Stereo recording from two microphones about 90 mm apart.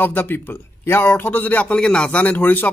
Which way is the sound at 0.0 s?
20° left (ahead or behind).